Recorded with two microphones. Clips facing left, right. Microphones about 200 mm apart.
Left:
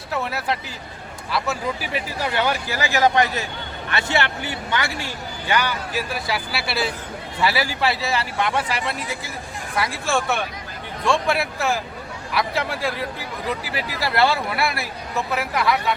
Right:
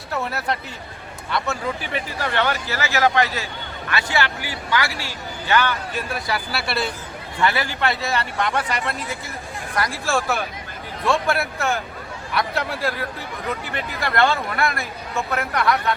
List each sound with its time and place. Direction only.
0.1 s speech: centre (ahead or behind)
5.9 s speech: 5° left (ahead or behind)